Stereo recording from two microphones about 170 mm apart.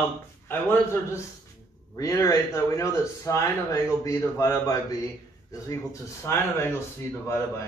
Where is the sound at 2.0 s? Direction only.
20° left (ahead or behind).